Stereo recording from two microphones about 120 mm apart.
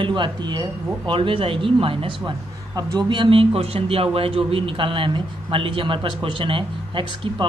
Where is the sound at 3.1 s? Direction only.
45° right (ahead or behind).